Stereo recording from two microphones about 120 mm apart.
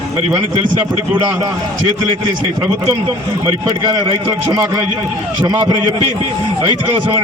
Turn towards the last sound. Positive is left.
turn(degrees=-30)  # may be behind; listen again after turning